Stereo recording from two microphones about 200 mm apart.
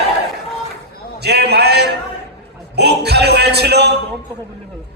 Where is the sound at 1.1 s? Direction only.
55° right (ahead or behind).